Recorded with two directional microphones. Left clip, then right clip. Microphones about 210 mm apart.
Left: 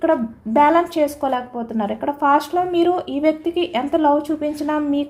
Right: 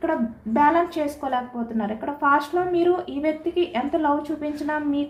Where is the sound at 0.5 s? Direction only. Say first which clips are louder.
Left 5 dB; 50° left (ahead or behind).